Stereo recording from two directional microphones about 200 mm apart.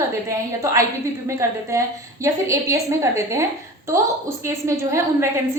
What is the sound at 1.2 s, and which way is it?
A woman's voice, 15° right (ahead or behind).